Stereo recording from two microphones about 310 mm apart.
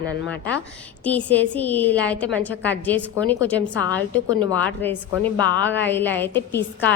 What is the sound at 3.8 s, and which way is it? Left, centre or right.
Speech, centre.